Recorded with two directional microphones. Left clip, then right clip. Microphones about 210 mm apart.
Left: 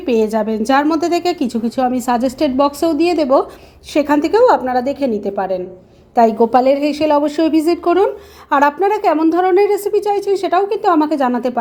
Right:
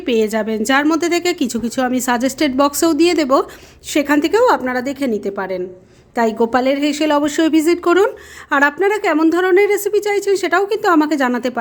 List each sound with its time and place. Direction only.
0.0 s a woman's voice: 15° right (ahead or behind)